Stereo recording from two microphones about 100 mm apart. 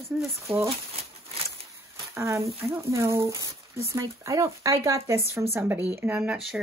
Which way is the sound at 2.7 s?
30° right (ahead or behind).